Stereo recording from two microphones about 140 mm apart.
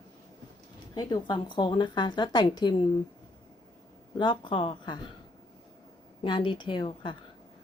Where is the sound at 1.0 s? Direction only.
30° left (ahead or behind).